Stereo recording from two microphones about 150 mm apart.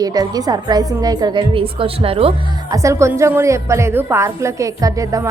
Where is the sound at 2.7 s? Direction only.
20° right (ahead or behind).